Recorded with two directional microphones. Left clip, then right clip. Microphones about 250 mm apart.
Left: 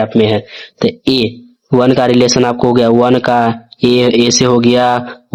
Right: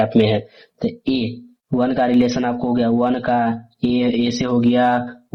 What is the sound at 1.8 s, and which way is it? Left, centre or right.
Speech, left.